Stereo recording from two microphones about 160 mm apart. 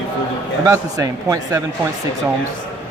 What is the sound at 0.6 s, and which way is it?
Speech, 20° right (ahead or behind).